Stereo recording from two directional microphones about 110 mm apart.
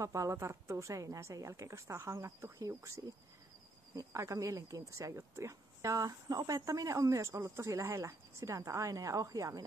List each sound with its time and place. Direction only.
0.0 s speech: 30° right (ahead or behind)
3.9 s speech: 30° right (ahead or behind)